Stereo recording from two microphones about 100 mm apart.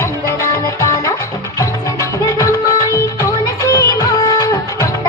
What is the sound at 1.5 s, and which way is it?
Music, 30° left (ahead or behind).